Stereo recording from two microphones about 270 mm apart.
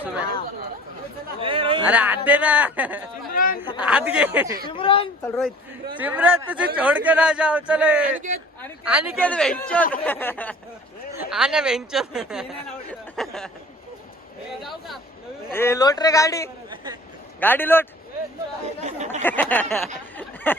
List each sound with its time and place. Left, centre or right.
1.4 s speech: centre
1.9 s speech: centre
3.3 s a sound: left
3.8 s speech: centre
4.7 s a woman's voice: centre
5.2 s a man's voice: centre
11.1 s speech: centre
14.6 s speech: centre
15.5 s a man's voice: centre
18.8 s speech: right
19.2 s a man's voice: centre
20.1 s a sound: centre